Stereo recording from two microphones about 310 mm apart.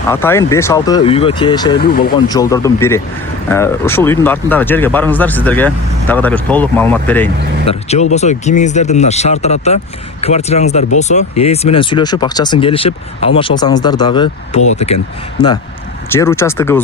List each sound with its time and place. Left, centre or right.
0.1 s speech: centre
1.8 s speech: left
2.2 s speech: centre
7.6 s speech: centre
16.1 s speech: centre